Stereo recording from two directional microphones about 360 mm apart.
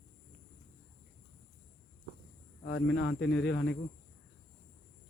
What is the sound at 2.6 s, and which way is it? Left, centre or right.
Speech, left.